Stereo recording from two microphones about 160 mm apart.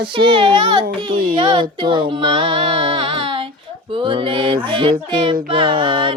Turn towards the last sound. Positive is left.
turn(degrees=-30)  # may be behind; listen again after turning